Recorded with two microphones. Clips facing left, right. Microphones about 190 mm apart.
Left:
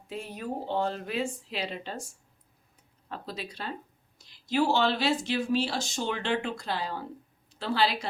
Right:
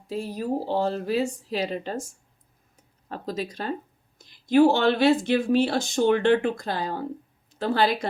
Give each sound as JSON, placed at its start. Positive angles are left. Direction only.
{"t": 0.1, "sound": "a woman's voice", "side_deg": -35}
{"t": 3.1, "sound": "a woman's voice", "side_deg": -45}